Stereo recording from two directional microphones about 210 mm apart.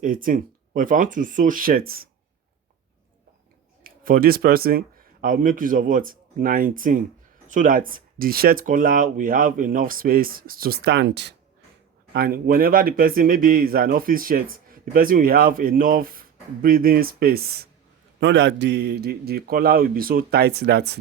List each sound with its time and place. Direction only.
0.0 s speech: 40° right (ahead or behind)
3.8 s speech: 40° right (ahead or behind)
18.2 s speech: 55° right (ahead or behind)